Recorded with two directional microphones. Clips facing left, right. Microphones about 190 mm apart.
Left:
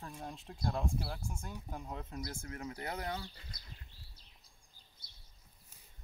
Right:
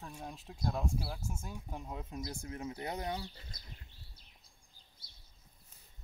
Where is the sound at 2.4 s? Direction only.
20° right (ahead or behind).